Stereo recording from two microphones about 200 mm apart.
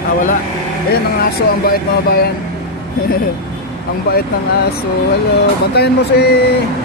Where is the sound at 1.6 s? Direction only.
50° left (ahead or behind).